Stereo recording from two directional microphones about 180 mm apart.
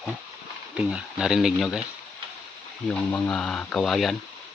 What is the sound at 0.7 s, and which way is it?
Speech, 5° right (ahead or behind).